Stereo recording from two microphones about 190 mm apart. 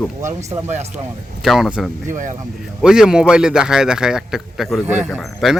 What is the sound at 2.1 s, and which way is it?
Speech, 40° right (ahead or behind).